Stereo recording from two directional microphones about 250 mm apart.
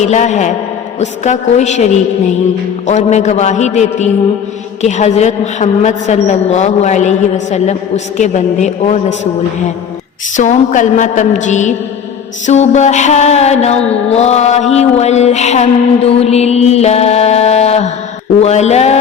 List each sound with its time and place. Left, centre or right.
0.0 s a woman's voice: left
10.3 s a woman's voice: left